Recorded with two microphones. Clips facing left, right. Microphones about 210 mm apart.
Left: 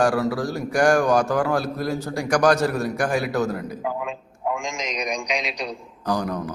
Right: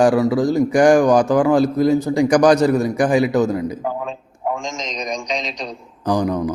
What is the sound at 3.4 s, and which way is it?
Speech, centre (ahead or behind).